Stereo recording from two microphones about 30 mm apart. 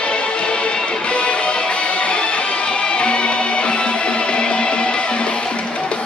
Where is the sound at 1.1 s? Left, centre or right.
Left.